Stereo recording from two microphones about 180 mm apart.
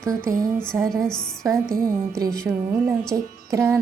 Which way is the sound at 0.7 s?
10° right (ahead or behind).